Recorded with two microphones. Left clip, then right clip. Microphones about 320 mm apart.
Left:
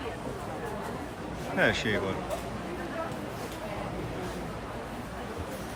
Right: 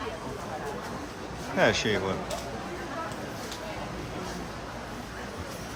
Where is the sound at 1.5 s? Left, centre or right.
Centre.